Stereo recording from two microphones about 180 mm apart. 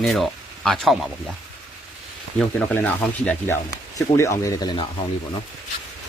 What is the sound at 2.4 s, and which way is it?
Speech, 5° left (ahead or behind).